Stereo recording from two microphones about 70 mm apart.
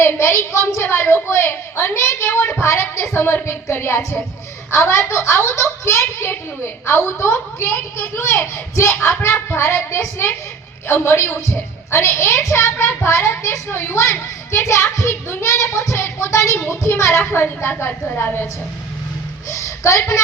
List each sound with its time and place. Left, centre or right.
0.0 s a woman's voice: left
19.5 s speech: left